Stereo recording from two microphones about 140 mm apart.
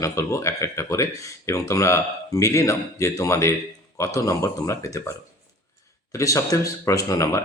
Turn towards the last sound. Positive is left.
turn(degrees=25)  # may be behind; listen again after turning